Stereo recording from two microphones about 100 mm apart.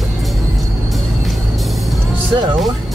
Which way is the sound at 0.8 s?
Centre (ahead or behind).